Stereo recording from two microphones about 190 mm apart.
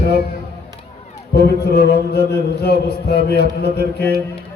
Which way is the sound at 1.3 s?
60° left (ahead or behind).